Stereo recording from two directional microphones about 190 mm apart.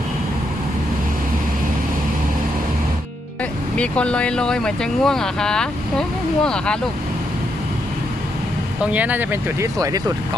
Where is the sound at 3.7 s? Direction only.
5° left (ahead or behind).